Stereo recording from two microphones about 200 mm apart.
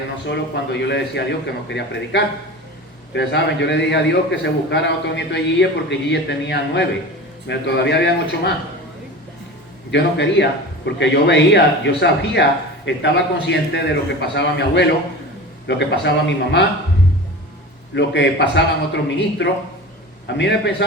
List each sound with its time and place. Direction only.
0.3 s a man's voice: 60° left (ahead or behind)
9.9 s a man's voice: 60° left (ahead or behind)
17.9 s a man's voice: 60° left (ahead or behind)